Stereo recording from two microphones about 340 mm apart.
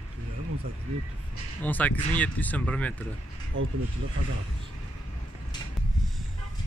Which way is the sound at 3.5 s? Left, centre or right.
Right.